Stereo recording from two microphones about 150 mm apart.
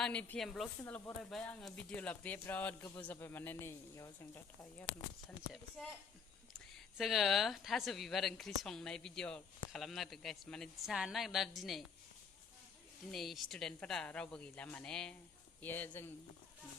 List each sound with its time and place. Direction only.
0.0 s speech: 10° left (ahead or behind)
0.8 s speech: 10° left (ahead or behind)
6.5 s speech: centre (ahead or behind)
13.1 s speech: centre (ahead or behind)